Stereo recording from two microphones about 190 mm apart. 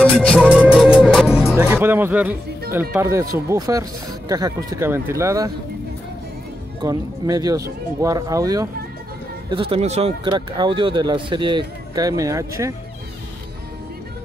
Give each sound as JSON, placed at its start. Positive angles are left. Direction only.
{"t": 0.0, "sound": "music", "side_deg": 5}
{"t": 1.7, "sound": "speech", "side_deg": -10}
{"t": 6.8, "sound": "speech", "side_deg": -20}
{"t": 9.5, "sound": "speech", "side_deg": -30}